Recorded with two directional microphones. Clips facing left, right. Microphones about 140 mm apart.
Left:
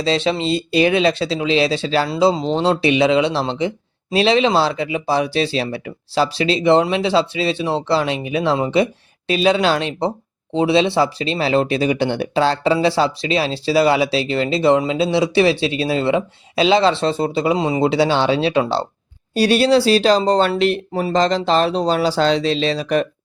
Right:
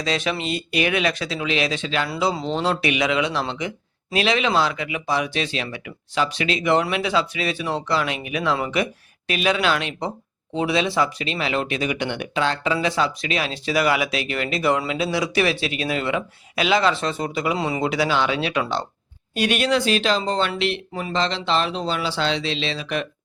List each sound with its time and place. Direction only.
0.0 s speech: 30° left (ahead or behind)